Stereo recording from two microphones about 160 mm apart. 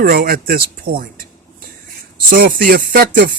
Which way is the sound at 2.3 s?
60° right (ahead or behind).